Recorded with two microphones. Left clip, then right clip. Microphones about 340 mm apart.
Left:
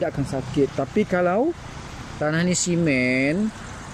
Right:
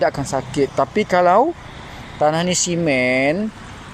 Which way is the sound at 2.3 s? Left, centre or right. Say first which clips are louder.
Right 4 dB; centre.